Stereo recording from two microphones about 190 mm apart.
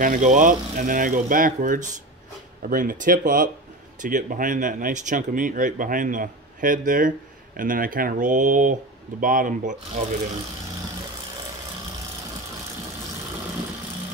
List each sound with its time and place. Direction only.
0.0 s speech: 40° right (ahead or behind)